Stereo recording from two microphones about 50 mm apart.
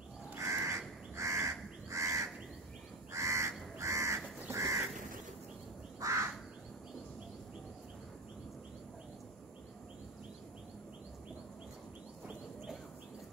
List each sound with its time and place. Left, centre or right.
0.4 s crow: right
4.5 s crow: right
5.9 s duck: right